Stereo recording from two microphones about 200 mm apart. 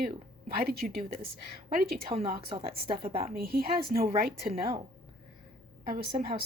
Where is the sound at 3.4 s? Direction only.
50° right (ahead or behind).